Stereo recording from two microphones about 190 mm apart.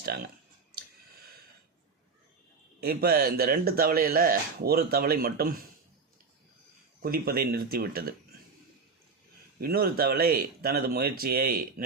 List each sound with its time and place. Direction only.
0.0 s speech: 55° right (ahead or behind)
2.8 s speech: 55° right (ahead or behind)
7.0 s speech: 50° right (ahead or behind)
9.6 s speech: 50° right (ahead or behind)